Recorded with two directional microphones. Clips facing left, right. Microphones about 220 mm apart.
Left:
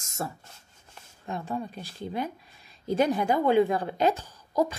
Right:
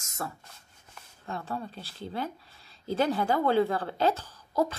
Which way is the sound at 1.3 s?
15° left (ahead or behind).